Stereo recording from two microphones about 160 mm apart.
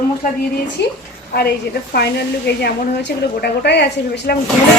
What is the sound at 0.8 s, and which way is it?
Speech, 90° left.